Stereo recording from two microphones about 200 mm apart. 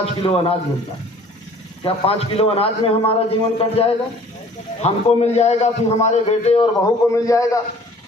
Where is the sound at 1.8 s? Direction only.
30° left (ahead or behind).